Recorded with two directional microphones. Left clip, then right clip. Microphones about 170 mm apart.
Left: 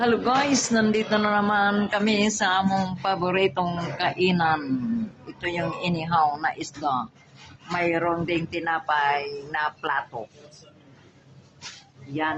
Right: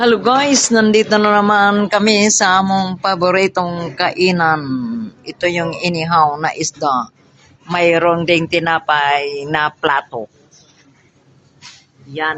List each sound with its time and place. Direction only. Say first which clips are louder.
0.0 s speech: right 9 dB; 40° right (ahead or behind)
2.6 s speech: right 9 dB; 25° right (ahead or behind); by 10.2 s 40° right (ahead or behind)